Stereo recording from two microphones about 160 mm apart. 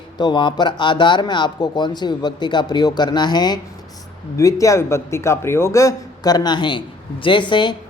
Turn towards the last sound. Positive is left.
turn(degrees=30)  # may be behind; listen again after turning